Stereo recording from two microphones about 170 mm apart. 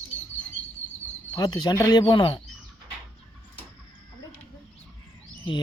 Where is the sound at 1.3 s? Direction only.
25° left (ahead or behind).